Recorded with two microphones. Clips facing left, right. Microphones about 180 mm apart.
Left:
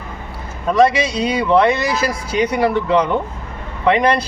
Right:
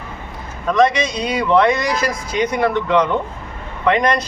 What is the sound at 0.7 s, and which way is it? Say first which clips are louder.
Speech: left 1 dB; 10° left (ahead or behind).